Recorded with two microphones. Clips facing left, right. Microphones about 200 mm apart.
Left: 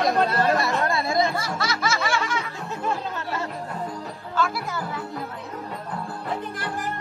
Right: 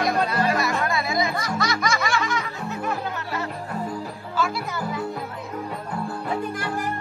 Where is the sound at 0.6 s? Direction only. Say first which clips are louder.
Even; 30° left (ahead or behind).